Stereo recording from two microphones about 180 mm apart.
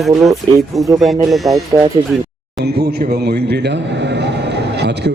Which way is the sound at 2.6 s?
65° right (ahead or behind).